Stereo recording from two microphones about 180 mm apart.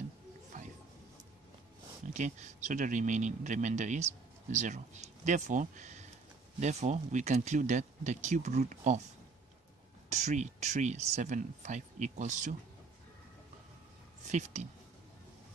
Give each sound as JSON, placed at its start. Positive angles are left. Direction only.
{"t": 0.5, "sound": "a sound", "side_deg": -45}
{"t": 2.1, "sound": "a man's voice", "side_deg": -40}
{"t": 10.0, "sound": "a man's voice", "side_deg": -40}
{"t": 14.2, "sound": "speech", "side_deg": -40}